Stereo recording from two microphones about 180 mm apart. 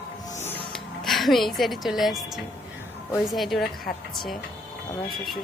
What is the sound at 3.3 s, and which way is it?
A woman's voice, centre (ahead or behind).